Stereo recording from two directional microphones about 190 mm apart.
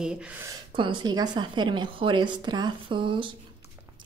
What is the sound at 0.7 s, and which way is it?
Speech, 25° right (ahead or behind).